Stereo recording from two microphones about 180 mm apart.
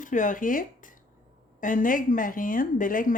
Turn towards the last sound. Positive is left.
turn(degrees=50)  # may be behind; listen again after turning